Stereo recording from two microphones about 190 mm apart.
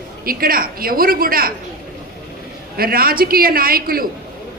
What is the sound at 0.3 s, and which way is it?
A man's voice, 50° right (ahead or behind).